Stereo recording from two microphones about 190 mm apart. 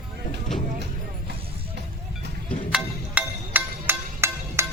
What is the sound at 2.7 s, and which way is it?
Music, 10° right (ahead or behind).